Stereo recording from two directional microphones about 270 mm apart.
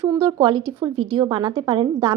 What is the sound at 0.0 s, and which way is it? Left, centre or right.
A woman's voice, centre.